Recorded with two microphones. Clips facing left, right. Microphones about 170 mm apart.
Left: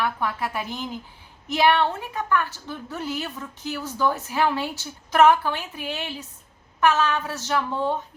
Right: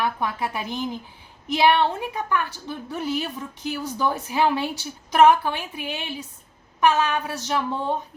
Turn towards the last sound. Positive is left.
turn(degrees=-15)  # may be behind; listen again after turning